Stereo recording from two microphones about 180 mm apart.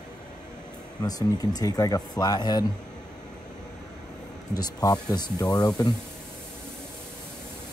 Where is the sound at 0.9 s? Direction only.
20° left (ahead or behind).